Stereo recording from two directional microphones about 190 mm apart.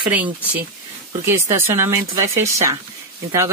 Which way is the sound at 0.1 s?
10° right (ahead or behind).